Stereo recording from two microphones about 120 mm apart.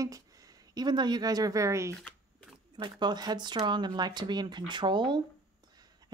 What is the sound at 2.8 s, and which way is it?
A woman's voice, 40° right (ahead or behind).